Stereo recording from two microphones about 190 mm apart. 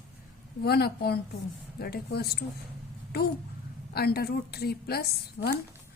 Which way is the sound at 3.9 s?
55° left (ahead or behind).